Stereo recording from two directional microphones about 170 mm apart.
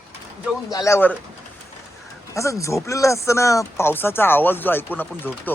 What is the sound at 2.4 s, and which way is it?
Speech, 20° left (ahead or behind).